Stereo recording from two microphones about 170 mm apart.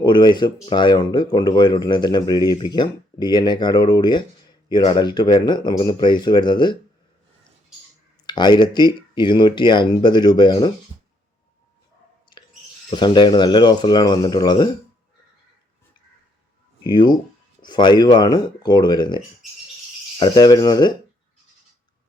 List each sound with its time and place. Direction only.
0.0 s speech: 25° left (ahead or behind)
8.3 s speech: 25° left (ahead or behind)
12.9 s speech: 25° left (ahead or behind)
16.8 s speech: 25° left (ahead or behind)